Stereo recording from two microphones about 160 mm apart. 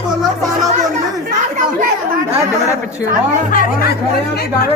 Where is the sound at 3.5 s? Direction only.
55° left (ahead or behind).